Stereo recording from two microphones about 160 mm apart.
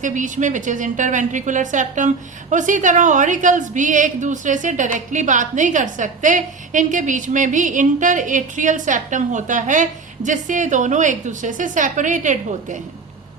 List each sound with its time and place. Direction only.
0.0 s a woman's voice: 50° right (ahead or behind)